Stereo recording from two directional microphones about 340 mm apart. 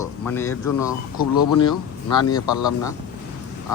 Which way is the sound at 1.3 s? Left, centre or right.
Left.